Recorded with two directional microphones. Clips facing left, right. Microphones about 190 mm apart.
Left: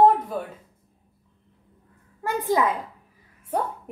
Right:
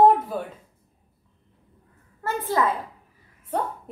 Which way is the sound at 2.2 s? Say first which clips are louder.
Left 1 dB; 15° left (ahead or behind).